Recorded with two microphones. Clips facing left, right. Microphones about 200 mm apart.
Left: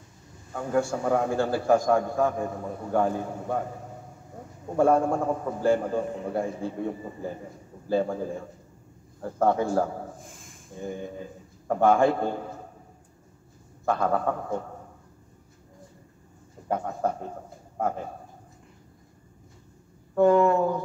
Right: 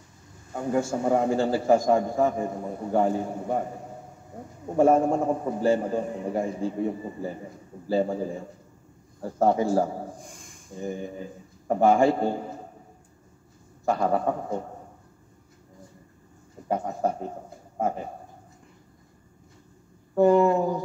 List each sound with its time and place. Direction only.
0.5 s a man's voice: 15° right (ahead or behind)
4.7 s a man's voice: 20° right (ahead or behind)
10.1 s a sound: centre (ahead or behind)
10.8 s a man's voice: 15° right (ahead or behind)
13.8 s a man's voice: 15° right (ahead or behind)
16.6 s a man's voice: 15° right (ahead or behind)
20.2 s a man's voice: 15° right (ahead or behind)